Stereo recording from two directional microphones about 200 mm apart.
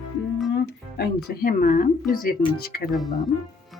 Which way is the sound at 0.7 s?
55° left (ahead or behind).